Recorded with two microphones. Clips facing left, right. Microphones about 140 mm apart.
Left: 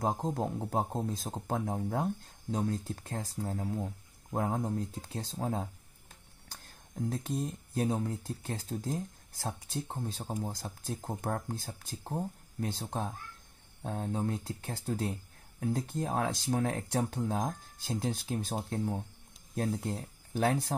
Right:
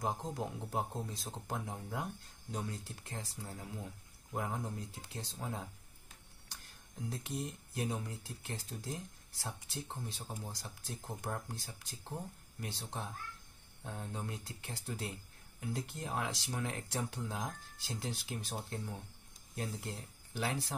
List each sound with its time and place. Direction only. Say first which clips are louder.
0.3 s speech: left 7 dB; 50° left (ahead or behind)
6.5 s a sound: left 7 dB; 50° left (ahead or behind)
7.8 s speech: left 7 dB; 55° left (ahead or behind)
19.5 s speech: left 9 dB; 65° left (ahead or behind)